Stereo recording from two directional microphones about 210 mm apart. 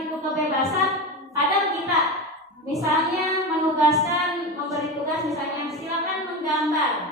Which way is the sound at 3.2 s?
15° right (ahead or behind).